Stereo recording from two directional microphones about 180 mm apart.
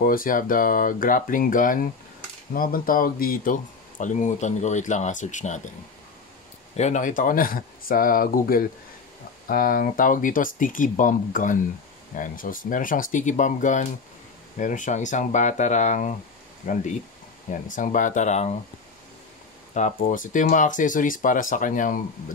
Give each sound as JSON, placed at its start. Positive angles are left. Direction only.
{"t": 0.0, "sound": "speech", "side_deg": 50}
{"t": 6.8, "sound": "speech", "side_deg": 45}
{"t": 19.7, "sound": "speech", "side_deg": 45}